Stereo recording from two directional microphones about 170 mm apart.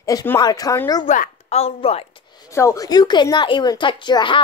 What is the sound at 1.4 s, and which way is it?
Speech, 35° left (ahead or behind).